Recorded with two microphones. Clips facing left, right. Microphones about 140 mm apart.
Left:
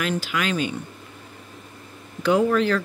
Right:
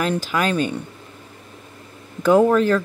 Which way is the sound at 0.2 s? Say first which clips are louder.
Right 4 dB; 40° right (ahead or behind).